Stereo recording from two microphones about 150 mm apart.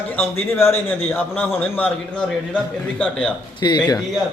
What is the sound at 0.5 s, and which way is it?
A man's voice, 15° left (ahead or behind).